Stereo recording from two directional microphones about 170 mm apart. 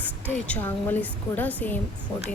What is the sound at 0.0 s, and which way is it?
Speech, 10° left (ahead or behind).